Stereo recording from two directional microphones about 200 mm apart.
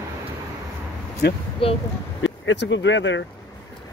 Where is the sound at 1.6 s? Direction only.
30° left (ahead or behind).